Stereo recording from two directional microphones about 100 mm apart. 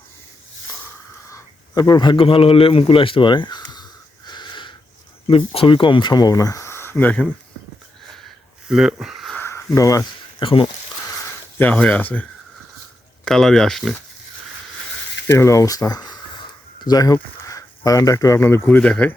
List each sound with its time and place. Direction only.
1.3 s a man's voice: 45° left (ahead or behind)
4.3 s a sound: 50° left (ahead or behind)
5.3 s speech: 60° left (ahead or behind); by 6.9 s 25° left (ahead or behind)
6.9 s speech: 15° left (ahead or behind)
8.6 s speech: 5° right (ahead or behind)
9.7 s speech: 35° left (ahead or behind)
10.4 s speech: 60° left (ahead or behind)
11.5 s speech: 15° left (ahead or behind)
13.2 s speech: 5° left (ahead or behind)
15.3 s speech: 30° left (ahead or behind)
18.6 s speech: 10° left (ahead or behind)